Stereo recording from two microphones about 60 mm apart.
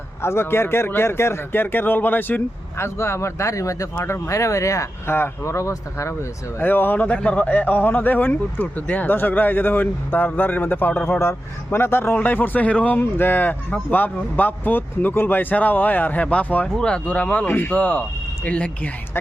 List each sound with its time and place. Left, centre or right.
0.2 s speech: left
2.7 s speech: left
5.0 s speech: left
6.6 s speech: left
11.0 s speech: left
16.6 s speech: centre
17.4 s speech: left